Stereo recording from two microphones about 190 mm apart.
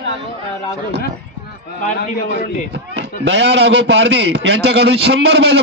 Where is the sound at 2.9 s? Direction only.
65° right (ahead or behind).